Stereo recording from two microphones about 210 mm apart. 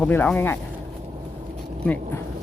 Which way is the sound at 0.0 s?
5° left (ahead or behind).